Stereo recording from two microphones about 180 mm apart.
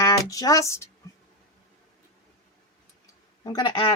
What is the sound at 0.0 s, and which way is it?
Speech, 20° left (ahead or behind).